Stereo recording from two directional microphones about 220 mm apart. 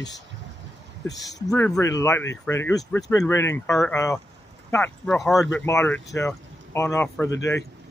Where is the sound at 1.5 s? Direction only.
5° left (ahead or behind).